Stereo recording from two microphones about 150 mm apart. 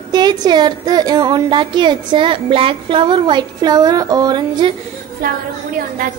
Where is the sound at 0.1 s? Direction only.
30° right (ahead or behind).